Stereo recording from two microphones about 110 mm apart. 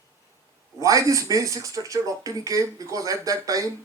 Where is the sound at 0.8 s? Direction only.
30° right (ahead or behind).